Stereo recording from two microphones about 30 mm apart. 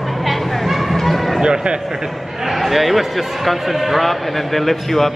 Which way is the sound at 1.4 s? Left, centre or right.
Right.